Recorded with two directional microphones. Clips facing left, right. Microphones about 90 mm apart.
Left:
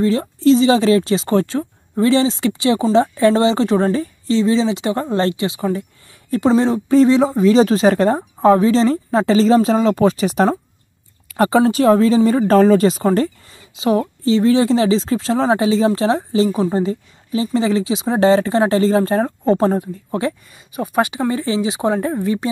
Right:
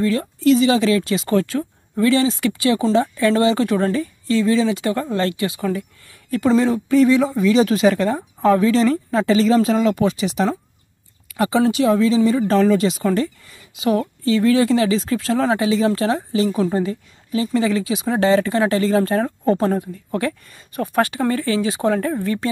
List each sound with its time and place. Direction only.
0.0 s speech: 25° left (ahead or behind)
8.2 s speech: 30° left (ahead or behind)